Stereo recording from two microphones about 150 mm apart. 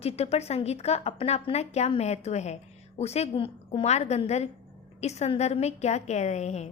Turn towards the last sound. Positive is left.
turn(degrees=50)  # may be behind; listen again after turning